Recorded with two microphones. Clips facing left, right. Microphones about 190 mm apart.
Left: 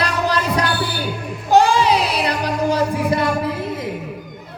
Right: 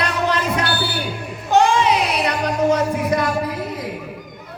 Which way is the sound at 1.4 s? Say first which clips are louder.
Left 1 dB; 35° left (ahead or behind).